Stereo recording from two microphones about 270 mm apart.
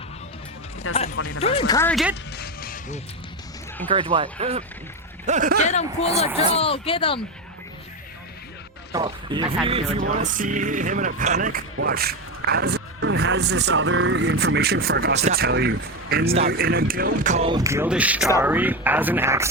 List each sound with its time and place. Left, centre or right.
1.1 s speech: left
1.4 s speech: left; by 2.1 s centre
2.3 s music: left
3.8 s speech: centre
6.6 s speech: left
8.9 s speech: centre